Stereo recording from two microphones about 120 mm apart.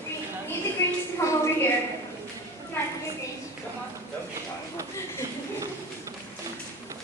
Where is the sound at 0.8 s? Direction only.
20° left (ahead or behind).